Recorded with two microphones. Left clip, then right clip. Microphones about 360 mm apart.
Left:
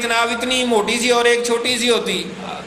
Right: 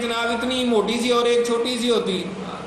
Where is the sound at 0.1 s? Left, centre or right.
Left.